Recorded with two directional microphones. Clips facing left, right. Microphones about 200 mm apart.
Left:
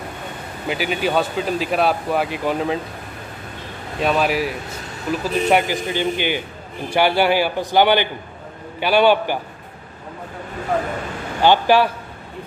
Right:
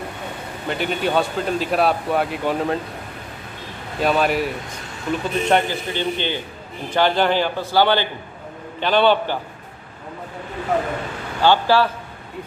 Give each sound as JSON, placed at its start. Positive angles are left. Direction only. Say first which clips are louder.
{"t": 0.7, "sound": "a man's voice", "louder": "left 1 dB", "side_deg": 5}
{"t": 4.0, "sound": "a man's voice", "louder": "even", "side_deg": 0}
{"t": 11.4, "sound": "a man's voice", "louder": "left 2 dB", "side_deg": 15}